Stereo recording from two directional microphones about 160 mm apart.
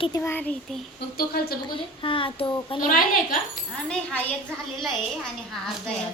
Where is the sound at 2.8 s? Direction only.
60° left (ahead or behind).